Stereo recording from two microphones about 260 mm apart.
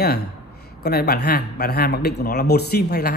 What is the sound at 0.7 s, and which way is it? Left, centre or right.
Speech, left.